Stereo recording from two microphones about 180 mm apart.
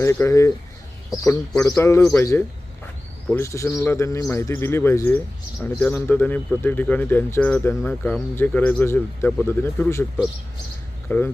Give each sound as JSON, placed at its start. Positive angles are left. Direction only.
{"t": 0.0, "sound": "speech", "side_deg": 15}
{"t": 11.1, "sound": "speech", "side_deg": 15}